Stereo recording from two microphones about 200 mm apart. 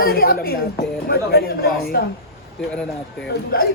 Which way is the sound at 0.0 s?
50° left (ahead or behind).